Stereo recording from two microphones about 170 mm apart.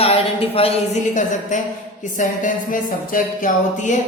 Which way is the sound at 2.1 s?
50° left (ahead or behind).